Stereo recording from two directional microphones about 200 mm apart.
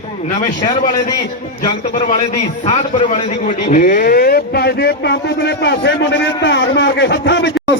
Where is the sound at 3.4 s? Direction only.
40° left (ahead or behind); by 7.5 s 65° left (ahead or behind).